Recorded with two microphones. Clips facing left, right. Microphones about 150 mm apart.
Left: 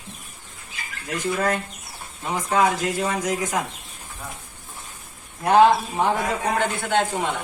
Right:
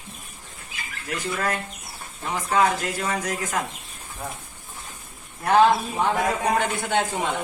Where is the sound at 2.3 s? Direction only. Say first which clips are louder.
Left 1 dB; 15° left (ahead or behind).